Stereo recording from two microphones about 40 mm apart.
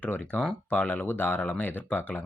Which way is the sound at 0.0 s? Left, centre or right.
Left.